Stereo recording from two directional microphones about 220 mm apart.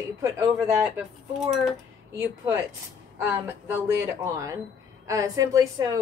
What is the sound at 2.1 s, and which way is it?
Speech, 10° right (ahead or behind).